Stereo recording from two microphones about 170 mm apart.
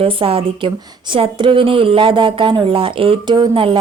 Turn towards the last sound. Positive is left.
turn(degrees=-30)  # may be behind; listen again after turning